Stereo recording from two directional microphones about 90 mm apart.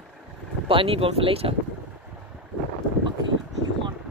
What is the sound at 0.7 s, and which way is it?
Speech, 85° right.